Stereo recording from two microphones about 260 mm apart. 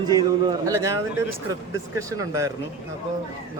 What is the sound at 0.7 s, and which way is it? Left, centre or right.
A man's voice, centre.